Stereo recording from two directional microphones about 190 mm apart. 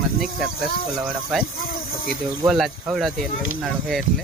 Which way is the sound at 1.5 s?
50° left (ahead or behind).